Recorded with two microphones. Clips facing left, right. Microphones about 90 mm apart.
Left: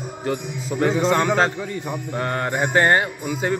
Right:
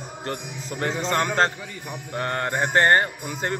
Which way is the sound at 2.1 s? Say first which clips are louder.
Left 1 dB; 15° left (ahead or behind).